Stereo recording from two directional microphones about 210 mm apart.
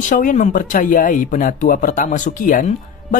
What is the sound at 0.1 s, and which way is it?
Speech, 40° left (ahead or behind).